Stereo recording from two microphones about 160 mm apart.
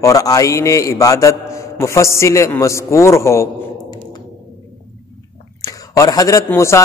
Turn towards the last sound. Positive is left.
turn(degrees=15)  # may be behind; listen again after turning